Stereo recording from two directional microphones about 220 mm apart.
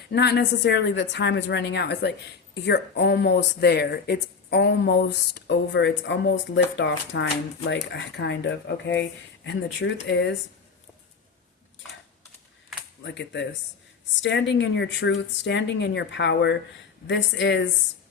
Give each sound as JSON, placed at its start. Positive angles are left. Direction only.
{"t": 0.1, "sound": "speech", "side_deg": 50}
{"t": 13.0, "sound": "speech", "side_deg": 55}